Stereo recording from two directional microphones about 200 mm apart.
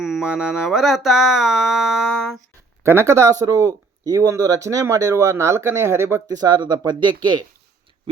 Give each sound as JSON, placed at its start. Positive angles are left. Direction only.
{"t": 0.0, "sound": "speech", "side_deg": -5}